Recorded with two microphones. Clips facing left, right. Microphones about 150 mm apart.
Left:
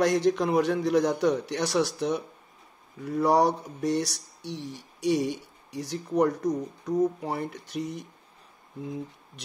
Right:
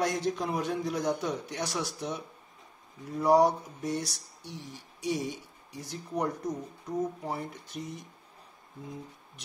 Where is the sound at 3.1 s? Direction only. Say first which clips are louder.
Left 1 dB; 80° left.